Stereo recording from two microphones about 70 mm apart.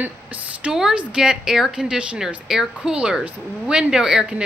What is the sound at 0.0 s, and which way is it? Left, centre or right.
A woman's voice, right.